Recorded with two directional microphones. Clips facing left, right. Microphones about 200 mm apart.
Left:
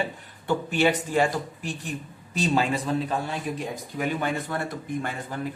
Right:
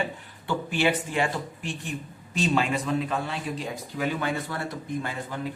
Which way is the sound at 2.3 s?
35° left (ahead or behind).